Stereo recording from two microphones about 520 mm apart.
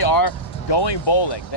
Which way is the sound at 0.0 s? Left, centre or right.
Left.